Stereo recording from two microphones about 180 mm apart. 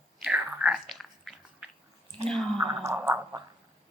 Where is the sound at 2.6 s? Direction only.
20° right (ahead or behind).